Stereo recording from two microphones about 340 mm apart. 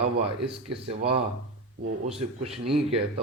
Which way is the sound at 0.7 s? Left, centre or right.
Centre.